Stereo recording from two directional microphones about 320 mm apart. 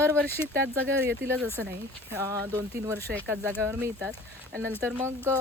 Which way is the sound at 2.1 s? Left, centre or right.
Centre.